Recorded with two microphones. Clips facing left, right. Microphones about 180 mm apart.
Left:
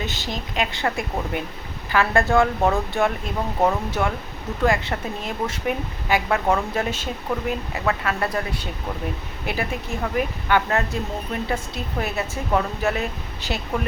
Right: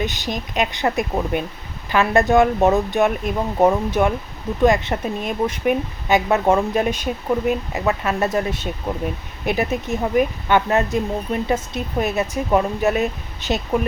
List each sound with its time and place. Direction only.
0.0 s a woman's voice: 15° right (ahead or behind)